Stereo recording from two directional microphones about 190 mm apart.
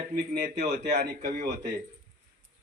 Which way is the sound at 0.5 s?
40° right (ahead or behind).